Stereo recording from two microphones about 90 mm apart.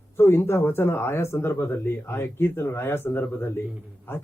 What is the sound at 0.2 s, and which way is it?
Speech, 25° left (ahead or behind).